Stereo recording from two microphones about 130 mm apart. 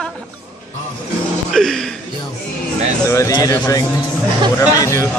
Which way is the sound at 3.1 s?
25° left (ahead or behind).